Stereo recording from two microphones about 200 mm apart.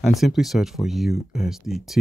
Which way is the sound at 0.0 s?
Centre (ahead or behind).